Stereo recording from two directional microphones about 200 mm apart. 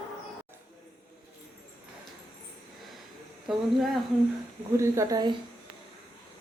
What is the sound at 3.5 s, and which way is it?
Speech, centre (ahead or behind).